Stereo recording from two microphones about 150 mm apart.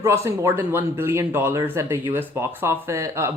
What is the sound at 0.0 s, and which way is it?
A woman's voice, 20° right (ahead or behind).